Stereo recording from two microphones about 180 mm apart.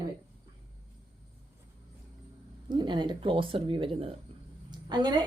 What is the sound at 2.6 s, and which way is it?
A woman's voice, 25° right (ahead or behind).